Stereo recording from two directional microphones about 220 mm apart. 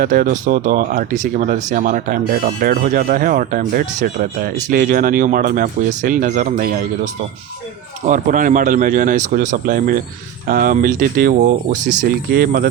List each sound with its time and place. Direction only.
0.0 s speech: 40° right (ahead or behind)